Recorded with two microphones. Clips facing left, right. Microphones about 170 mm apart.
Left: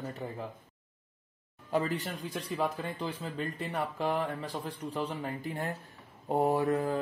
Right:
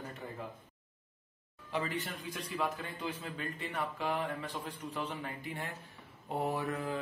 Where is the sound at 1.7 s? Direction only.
40° left (ahead or behind).